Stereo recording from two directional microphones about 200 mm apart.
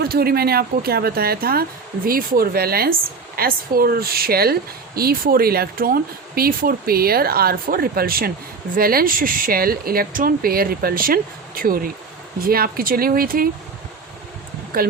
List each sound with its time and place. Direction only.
0.0 s speech: 50° right (ahead or behind)
14.7 s speech: 45° right (ahead or behind)